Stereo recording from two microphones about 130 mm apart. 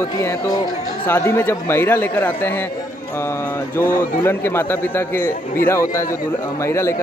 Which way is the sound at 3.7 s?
15° left (ahead or behind).